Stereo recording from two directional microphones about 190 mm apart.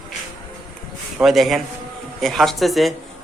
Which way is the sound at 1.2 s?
Centre (ahead or behind).